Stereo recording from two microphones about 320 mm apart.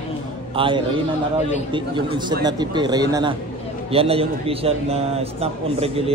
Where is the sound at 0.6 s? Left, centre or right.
Centre.